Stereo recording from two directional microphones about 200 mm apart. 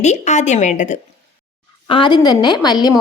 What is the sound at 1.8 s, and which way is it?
A woman's voice, 25° left (ahead or behind).